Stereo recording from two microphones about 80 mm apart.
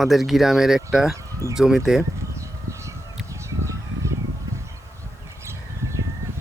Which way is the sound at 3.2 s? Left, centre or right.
Right.